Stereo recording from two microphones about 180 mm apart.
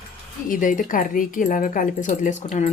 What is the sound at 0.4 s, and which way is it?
Speech, 50° left (ahead or behind).